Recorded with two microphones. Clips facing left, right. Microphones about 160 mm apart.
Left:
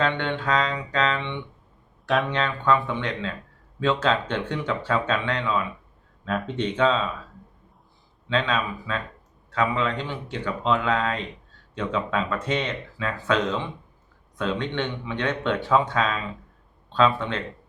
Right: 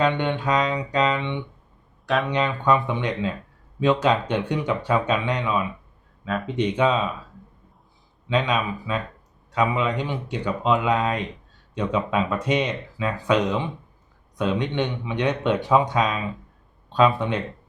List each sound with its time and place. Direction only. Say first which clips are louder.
0.0 s speech: right 3 dB; 15° right (ahead or behind)
2.0 s speech: even; centre (ahead or behind)
2.3 s speech: right 2 dB; 15° right (ahead or behind)
6.2 s speech: even; centre (ahead or behind)
6.6 s speech: right 2 dB; 10° right (ahead or behind)
8.3 s speech: right 2 dB; 15° right (ahead or behind)